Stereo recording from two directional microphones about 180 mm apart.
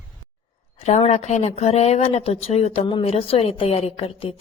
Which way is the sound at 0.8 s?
35° left (ahead or behind).